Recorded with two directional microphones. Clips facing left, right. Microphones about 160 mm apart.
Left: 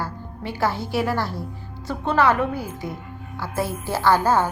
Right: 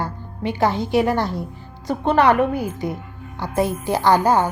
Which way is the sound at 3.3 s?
20° right (ahead or behind).